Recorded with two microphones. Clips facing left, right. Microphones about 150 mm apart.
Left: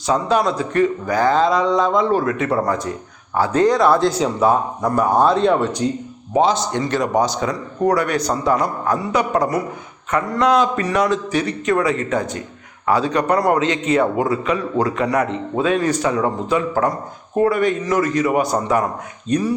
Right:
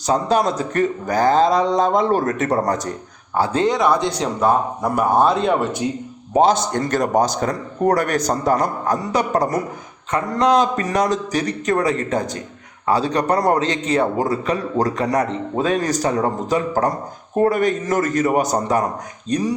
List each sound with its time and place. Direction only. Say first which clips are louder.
0.1 s a man's voice: even; 40° right (ahead or behind)
3.3 s speech: left 2 dB; 30° right (ahead or behind)
4.0 s speech: left 2 dB; 5° left (ahead or behind)
6.4 s a man's voice: right 2 dB; 45° right (ahead or behind)